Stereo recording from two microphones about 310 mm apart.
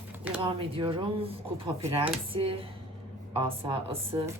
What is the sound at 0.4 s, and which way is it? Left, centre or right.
Speech, centre.